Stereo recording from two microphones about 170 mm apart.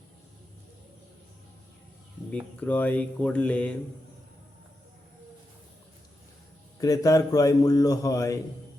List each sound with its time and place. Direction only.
2.3 s speech: 10° left (ahead or behind)
6.7 s a man's voice: 20° left (ahead or behind)